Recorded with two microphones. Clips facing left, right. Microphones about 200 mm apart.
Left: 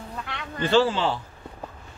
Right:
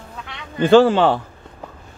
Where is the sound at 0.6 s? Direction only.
55° right (ahead or behind).